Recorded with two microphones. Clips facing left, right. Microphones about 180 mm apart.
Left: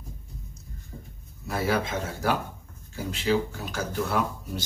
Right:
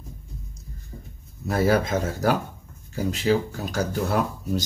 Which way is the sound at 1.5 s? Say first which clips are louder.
Right 6 dB; 40° right (ahead or behind).